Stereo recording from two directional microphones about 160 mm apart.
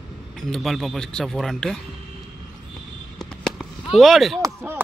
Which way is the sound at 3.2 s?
5° left (ahead or behind).